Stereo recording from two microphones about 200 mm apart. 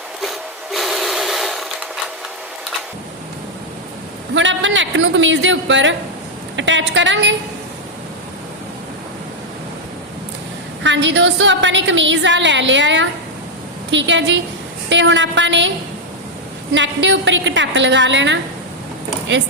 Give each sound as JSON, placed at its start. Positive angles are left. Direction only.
{"t": 0.2, "sound": "a sound", "side_deg": 0}
{"t": 4.4, "sound": "a woman's voice", "side_deg": -70}
{"t": 10.8, "sound": "a woman's voice", "side_deg": -65}
{"t": 16.7, "sound": "a woman's voice", "side_deg": -65}